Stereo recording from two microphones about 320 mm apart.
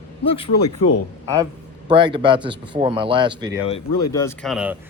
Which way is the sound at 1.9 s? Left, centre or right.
Centre.